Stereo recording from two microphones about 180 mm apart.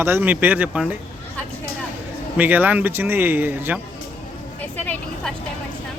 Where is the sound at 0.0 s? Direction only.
10° right (ahead or behind).